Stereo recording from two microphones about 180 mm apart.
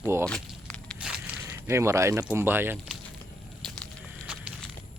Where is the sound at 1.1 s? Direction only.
10° right (ahead or behind).